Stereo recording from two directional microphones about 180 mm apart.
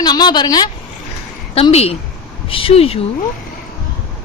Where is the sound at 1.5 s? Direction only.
35° left (ahead or behind).